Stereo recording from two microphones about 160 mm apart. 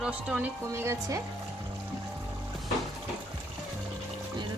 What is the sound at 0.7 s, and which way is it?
Speech, 15° right (ahead or behind).